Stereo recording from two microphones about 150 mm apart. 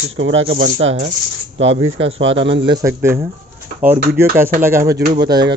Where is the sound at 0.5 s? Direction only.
75° right (ahead or behind).